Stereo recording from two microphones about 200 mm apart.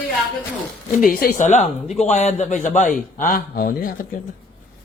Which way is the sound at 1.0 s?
45° left (ahead or behind).